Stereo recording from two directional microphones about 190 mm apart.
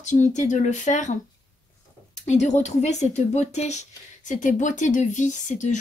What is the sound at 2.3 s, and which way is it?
A woman's voice, 35° left (ahead or behind).